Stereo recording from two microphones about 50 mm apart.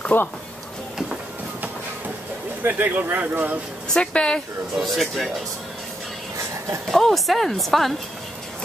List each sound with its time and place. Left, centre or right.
0.1 s speech: left
2.6 s speech: right
4.0 s speech: centre
4.8 s a woman's voice: centre
6.9 s a woman's voice: centre